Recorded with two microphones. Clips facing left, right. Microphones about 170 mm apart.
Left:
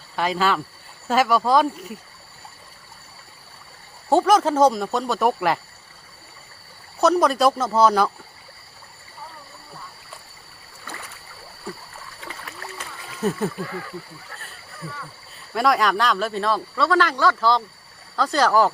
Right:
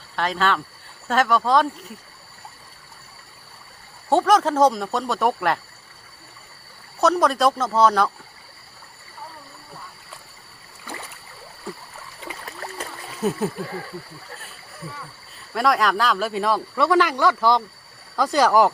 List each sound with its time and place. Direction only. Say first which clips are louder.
0.2 s speech: left 1 dB; 5° left (ahead or behind)
4.1 s speech: left 1 dB; centre (ahead or behind)
7.0 s speech: left 1 dB; centre (ahead or behind)
13.1 s a sound: even; centre (ahead or behind)
15.5 s speech: even; centre (ahead or behind)